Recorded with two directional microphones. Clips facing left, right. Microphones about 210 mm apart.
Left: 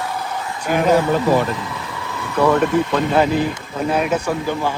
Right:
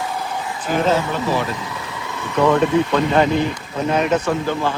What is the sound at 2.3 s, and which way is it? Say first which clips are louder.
A man's voice: even; 5° left (ahead or behind).